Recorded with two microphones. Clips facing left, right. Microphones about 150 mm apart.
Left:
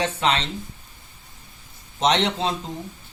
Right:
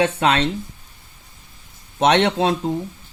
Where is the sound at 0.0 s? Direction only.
55° right (ahead or behind).